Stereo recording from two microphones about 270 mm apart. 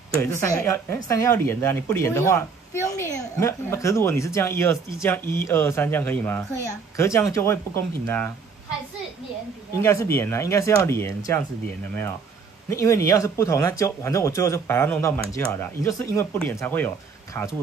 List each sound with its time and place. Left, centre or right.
0.2 s speech: centre
9.8 s speech: centre
12.6 s speech: centre